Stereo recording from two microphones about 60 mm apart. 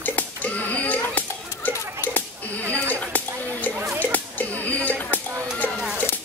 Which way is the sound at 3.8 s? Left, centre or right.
Right.